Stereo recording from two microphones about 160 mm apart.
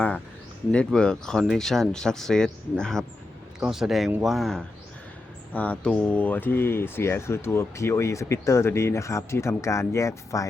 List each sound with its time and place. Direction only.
0.7 s speech: 5° left (ahead or behind)